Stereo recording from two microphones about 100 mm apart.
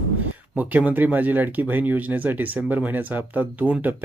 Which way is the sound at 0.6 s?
15° right (ahead or behind).